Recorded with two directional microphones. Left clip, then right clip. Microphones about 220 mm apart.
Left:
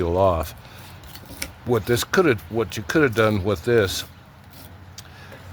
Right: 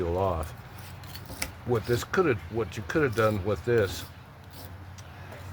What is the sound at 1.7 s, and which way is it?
Speech, 45° left (ahead or behind).